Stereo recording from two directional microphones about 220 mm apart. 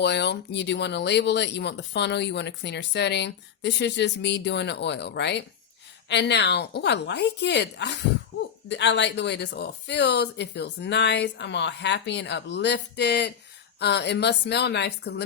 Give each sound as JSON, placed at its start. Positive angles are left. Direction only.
{"t": 0.0, "sound": "speech", "side_deg": 50}